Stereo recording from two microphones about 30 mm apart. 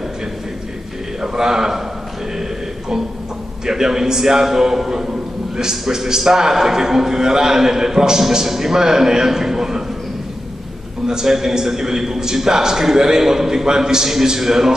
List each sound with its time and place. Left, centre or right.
1.2 s a man's voice: centre
3.6 s a man's voice: centre
11.1 s a man's voice: centre